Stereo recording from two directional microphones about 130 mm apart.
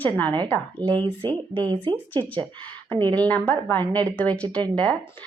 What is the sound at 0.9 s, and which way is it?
Speech, 35° right (ahead or behind).